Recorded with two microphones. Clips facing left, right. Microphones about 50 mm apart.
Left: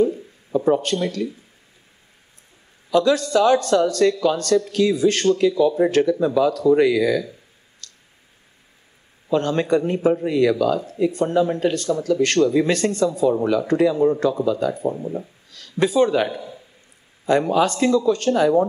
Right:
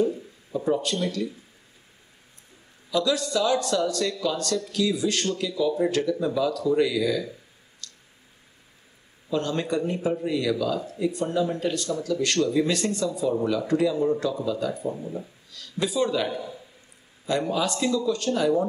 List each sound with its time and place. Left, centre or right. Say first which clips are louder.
0.6 s speech: left 6 dB; left
2.9 s a man's voice: left 7 dB; left
7.8 s a sound: even; left
9.3 s a man's voice: left 7 dB; left
15.0 s speech: left 6 dB; left
15.5 s speech: left 8 dB; left
17.3 s a man's voice: left 7 dB; left